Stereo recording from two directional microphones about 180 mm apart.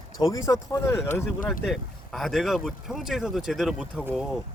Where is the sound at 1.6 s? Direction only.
Centre (ahead or behind).